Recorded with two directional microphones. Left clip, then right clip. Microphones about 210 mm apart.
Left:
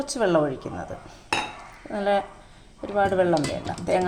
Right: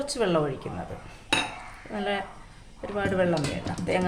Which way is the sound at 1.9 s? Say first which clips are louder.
Left 6 dB; 15° left (ahead or behind).